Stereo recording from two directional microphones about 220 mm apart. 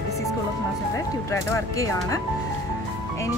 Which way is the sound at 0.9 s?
15° left (ahead or behind).